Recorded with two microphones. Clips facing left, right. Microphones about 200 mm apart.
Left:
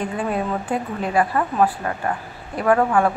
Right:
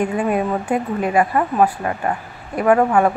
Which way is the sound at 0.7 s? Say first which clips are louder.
Right 4 dB; 20° right (ahead or behind).